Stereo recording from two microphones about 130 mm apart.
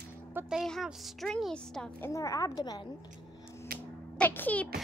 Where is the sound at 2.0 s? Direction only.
25° left (ahead or behind).